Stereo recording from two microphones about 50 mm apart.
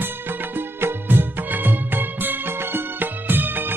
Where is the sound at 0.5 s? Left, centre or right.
Right.